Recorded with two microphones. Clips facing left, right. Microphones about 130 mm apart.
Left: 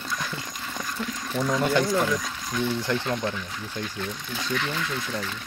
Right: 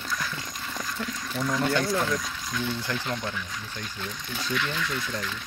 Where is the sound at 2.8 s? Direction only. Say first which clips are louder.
Left 5 dB; 25° left (ahead or behind).